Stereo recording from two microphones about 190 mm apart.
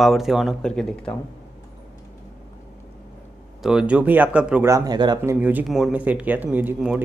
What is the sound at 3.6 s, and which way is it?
Speech, 5° right (ahead or behind).